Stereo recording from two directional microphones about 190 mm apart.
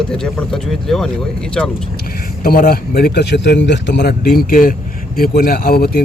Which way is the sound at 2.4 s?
50° left (ahead or behind).